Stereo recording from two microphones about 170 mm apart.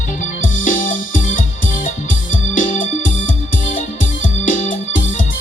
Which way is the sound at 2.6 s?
50° left (ahead or behind).